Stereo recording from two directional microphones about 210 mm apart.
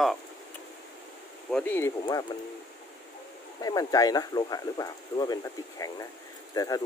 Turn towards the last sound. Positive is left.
turn(degrees=15)  # may be behind; listen again after turning